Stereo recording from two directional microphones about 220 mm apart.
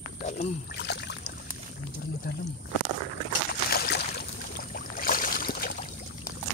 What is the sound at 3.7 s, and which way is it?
Boat, 45° left (ahead or behind).